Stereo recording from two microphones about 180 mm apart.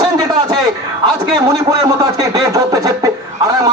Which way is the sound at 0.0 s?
20° right (ahead or behind).